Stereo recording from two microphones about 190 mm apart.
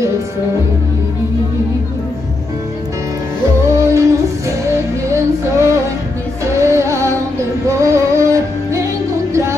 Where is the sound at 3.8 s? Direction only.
15° right (ahead or behind).